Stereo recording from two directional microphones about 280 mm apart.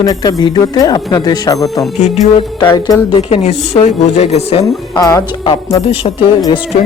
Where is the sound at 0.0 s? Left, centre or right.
Centre.